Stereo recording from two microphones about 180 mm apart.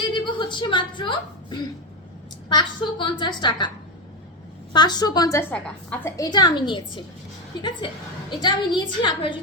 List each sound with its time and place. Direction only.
0.1 s a woman's voice: 25° left (ahead or behind)
4.7 s a woman's voice: 25° left (ahead or behind)
6.1 s a woman's voice: 20° left (ahead or behind)
8.3 s a woman's voice: 25° left (ahead or behind)